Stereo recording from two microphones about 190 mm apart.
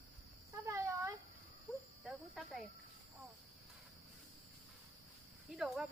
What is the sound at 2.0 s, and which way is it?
Cricket, 5° right (ahead or behind).